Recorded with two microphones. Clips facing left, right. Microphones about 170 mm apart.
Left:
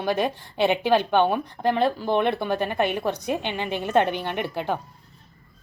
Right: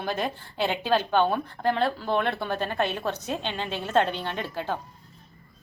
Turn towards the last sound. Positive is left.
turn(degrees=15)  # may be behind; listen again after turning